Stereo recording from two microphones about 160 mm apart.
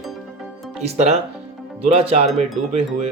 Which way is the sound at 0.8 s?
45° right (ahead or behind).